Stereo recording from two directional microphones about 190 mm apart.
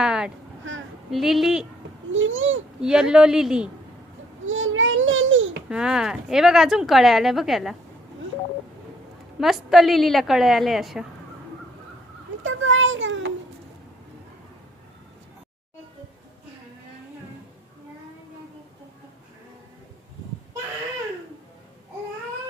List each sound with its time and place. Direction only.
0.0 s a sound: 5° right (ahead or behind)
0.7 s a sound: 90° right
1.1 s speech: centre (ahead or behind)
2.1 s a child's voice: 90° right
2.8 s speech: 5° right (ahead or behind)
4.4 s babbling: 90° right
5.6 s speech: 5° right (ahead or behind)
9.4 s speech: centre (ahead or behind)
12.4 s a child's voice: 90° right